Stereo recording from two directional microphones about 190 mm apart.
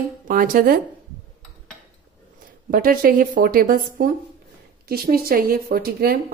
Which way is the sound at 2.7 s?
50° right (ahead or behind).